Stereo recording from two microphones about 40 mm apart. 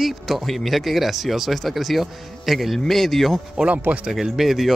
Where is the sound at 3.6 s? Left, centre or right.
Centre.